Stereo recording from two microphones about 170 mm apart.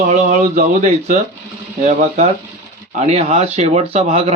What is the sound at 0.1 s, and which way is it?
Speech, 45° right (ahead or behind).